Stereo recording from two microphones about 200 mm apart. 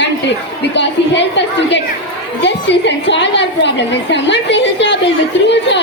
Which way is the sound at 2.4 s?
60° left (ahead or behind).